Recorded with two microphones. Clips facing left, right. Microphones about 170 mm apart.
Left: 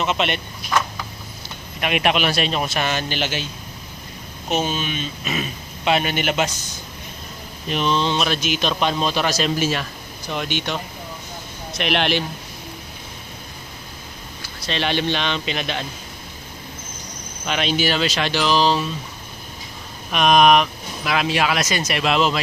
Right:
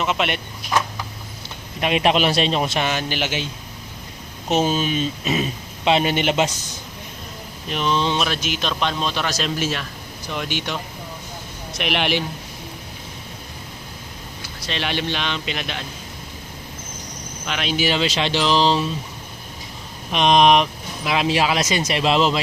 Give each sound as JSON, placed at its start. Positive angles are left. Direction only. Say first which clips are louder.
{"t": 0.0, "sound": "speech", "louder": "even", "side_deg": -5}
{"t": 1.8, "sound": "speech", "louder": "right 2 dB", "side_deg": -30}
{"t": 2.7, "sound": "speech", "louder": "right 1 dB", "side_deg": -15}
{"t": 4.6, "sound": "speech", "louder": "right 5 dB", "side_deg": -35}
{"t": 7.7, "sound": "speech", "louder": "left 1 dB", "side_deg": -5}
{"t": 11.8, "sound": "speech", "louder": "left 1 dB", "side_deg": -5}
{"t": 14.7, "sound": "speech", "louder": "left 3 dB", "side_deg": -5}
{"t": 17.4, "sound": "speech", "louder": "left 3 dB", "side_deg": 0}
{"t": 17.7, "sound": "speech", "louder": "right 4 dB", "side_deg": -20}
{"t": 20.1, "sound": "speech", "louder": "even", "side_deg": -25}